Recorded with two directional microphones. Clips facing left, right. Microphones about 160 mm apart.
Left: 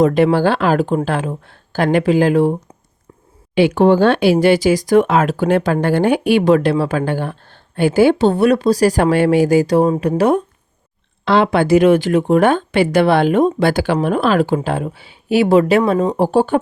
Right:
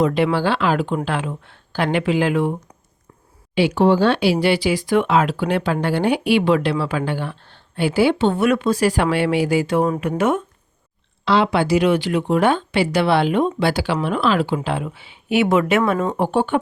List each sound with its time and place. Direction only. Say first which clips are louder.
0.0 s a woman's voice: left 5 dB; 45° left (ahead or behind)
3.5 s a woman's voice: left 4 dB; 50° left (ahead or behind); by 10.4 s 35° left (ahead or behind)
11.3 s a woman's voice: left 4 dB; 50° left (ahead or behind)